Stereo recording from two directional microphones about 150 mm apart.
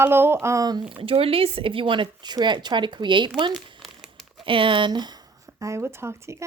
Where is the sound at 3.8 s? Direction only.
Centre (ahead or behind).